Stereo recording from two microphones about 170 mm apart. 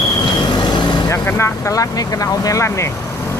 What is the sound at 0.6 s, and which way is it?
Vehicle, 25° left (ahead or behind).